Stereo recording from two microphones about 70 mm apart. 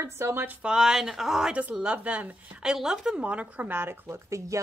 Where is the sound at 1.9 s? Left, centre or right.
Right.